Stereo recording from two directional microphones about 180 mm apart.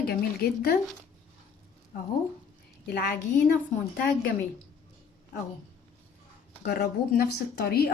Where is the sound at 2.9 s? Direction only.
60° left (ahead or behind).